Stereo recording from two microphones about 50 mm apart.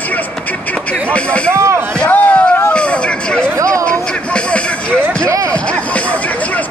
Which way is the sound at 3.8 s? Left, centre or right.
Left.